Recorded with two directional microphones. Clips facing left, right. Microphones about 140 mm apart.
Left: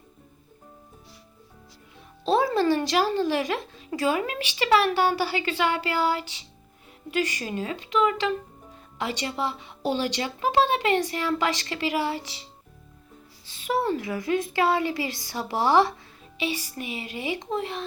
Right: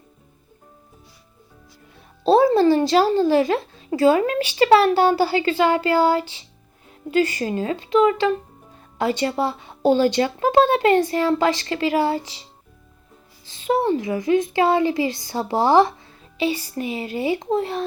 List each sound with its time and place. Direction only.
2.2 s speech: 30° right (ahead or behind); by 11.0 s 45° right (ahead or behind)
11.0 s speech: 30° right (ahead or behind)
13.6 s speech: 25° right (ahead or behind)